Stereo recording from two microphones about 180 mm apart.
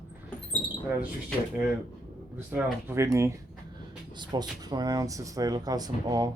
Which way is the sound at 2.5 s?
10° right (ahead or behind).